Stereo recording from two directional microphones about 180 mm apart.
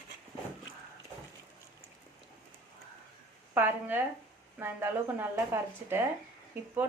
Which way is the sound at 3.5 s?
10° right (ahead or behind).